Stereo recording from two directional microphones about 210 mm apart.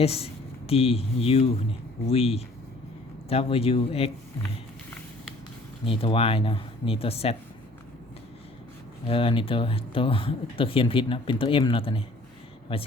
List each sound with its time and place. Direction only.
0.0 s speech: 30° left (ahead or behind)
5.8 s speech: 25° left (ahead or behind)
9.0 s speech: 25° left (ahead or behind)